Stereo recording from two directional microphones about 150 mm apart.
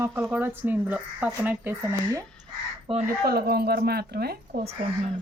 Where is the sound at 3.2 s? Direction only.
90° right.